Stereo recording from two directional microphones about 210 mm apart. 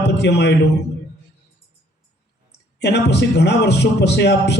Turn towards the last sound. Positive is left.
turn(degrees=55)  # may be behind; listen again after turning